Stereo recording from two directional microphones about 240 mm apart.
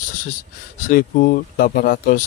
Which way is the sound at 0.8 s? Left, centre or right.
Left.